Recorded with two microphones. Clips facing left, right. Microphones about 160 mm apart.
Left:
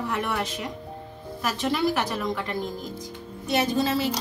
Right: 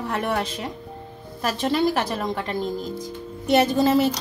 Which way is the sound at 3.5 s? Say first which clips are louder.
Right 6 dB; 60° right (ahead or behind).